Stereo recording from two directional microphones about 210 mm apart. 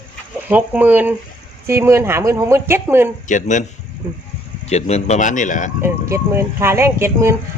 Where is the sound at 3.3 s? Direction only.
35° left (ahead or behind).